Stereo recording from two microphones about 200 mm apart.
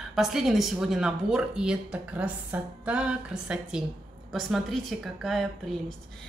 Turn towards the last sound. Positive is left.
turn(degrees=0)  # may be behind; listen again after turning